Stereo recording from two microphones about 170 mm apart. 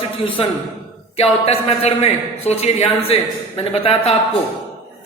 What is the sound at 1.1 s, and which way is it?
A man's voice, 35° left (ahead or behind).